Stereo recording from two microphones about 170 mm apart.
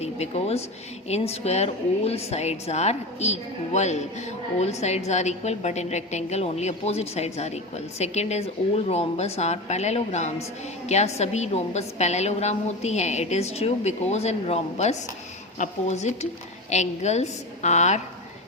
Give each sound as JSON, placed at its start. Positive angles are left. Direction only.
{"t": 0.0, "sound": "a woman's voice", "side_deg": 40}